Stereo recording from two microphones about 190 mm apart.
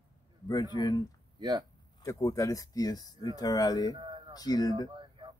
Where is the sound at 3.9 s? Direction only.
25° right (ahead or behind).